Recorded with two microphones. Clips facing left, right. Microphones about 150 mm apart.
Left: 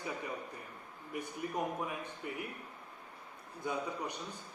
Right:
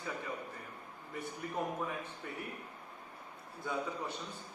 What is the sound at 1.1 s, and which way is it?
Speech, 15° left (ahead or behind).